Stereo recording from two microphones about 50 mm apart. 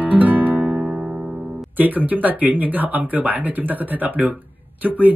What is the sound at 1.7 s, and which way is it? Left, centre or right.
Speech, right.